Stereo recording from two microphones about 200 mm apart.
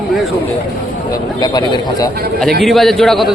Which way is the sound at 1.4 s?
20° left (ahead or behind).